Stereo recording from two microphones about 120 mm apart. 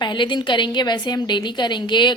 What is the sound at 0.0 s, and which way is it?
A woman's voice, 40° left (ahead or behind).